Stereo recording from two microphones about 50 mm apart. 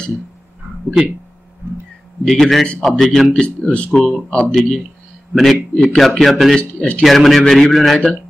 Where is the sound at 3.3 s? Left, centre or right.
Left.